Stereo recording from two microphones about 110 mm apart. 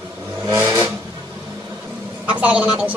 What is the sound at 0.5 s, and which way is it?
Vehicle, 20° right (ahead or behind).